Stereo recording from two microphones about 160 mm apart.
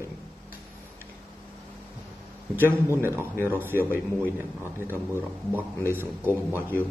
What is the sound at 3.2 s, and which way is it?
Speech, 15° right (ahead or behind).